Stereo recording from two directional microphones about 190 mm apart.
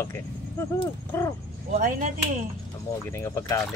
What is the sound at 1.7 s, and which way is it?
Speech, 45° right (ahead or behind).